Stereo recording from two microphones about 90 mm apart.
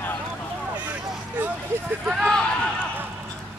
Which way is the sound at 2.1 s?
Centre (ahead or behind).